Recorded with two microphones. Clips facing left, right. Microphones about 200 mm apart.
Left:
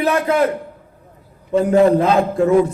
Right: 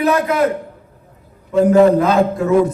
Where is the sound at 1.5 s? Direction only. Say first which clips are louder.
Right 2 dB; 30° left (ahead or behind).